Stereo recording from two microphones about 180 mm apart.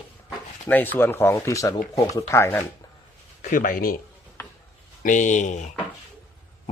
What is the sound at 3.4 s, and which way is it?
Speech, 50° left (ahead or behind).